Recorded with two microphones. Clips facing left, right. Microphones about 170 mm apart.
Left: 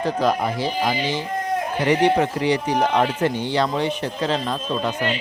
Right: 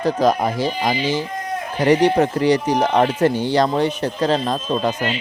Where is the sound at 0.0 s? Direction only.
40° right (ahead or behind).